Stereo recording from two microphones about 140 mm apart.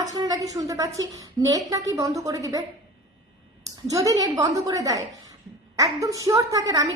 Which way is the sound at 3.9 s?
25° right (ahead or behind).